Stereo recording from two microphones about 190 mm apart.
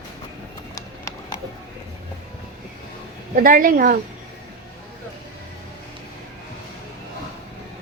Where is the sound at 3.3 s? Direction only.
45° right (ahead or behind).